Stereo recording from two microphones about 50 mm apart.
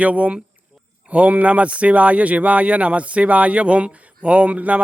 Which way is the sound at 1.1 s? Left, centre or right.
Right.